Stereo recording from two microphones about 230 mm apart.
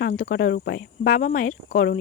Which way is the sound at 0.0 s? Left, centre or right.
Left.